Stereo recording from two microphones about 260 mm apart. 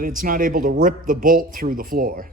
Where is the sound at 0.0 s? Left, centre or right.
Right.